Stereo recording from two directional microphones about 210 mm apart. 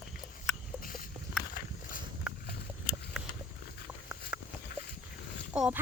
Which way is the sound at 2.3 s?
Centre (ahead or behind).